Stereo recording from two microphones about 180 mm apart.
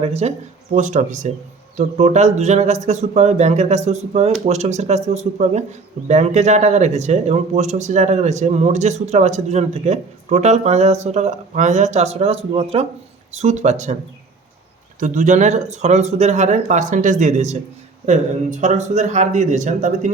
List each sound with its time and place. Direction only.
0.0 s speech: 35° right (ahead or behind)
14.9 s speech: 45° right (ahead or behind)